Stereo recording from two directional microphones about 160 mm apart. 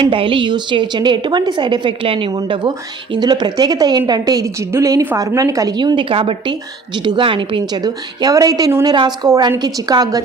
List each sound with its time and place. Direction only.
0.0 s a woman's voice: 30° right (ahead or behind)